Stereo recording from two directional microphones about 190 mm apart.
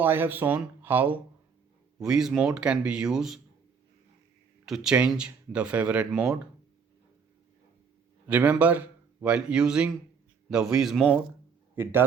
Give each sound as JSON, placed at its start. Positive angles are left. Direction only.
{"t": 0.0, "sound": "a man's voice", "side_deg": -10}
{"t": 4.6, "sound": "speech", "side_deg": 0}
{"t": 8.3, "sound": "a man's voice", "side_deg": -10}
{"t": 11.8, "sound": "a man's voice", "side_deg": -10}